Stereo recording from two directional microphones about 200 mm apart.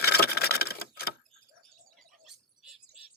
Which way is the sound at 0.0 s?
50° left (ahead or behind).